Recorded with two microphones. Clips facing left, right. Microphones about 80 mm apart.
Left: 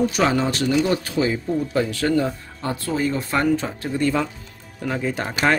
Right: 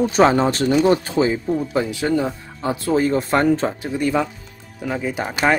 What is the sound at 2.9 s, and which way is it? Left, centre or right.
Speech, right.